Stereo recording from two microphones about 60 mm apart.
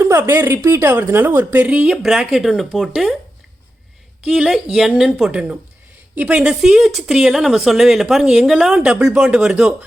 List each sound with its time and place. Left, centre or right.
0.0 s a woman's voice: right
1.5 s speech: right
2.0 s speech: centre
4.4 s speech: centre
5.3 s speech: centre